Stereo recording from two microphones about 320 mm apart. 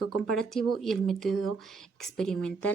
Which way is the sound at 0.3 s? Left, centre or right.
Centre.